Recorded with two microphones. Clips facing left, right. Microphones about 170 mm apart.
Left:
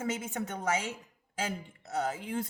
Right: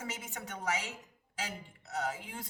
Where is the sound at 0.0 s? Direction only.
50° left (ahead or behind).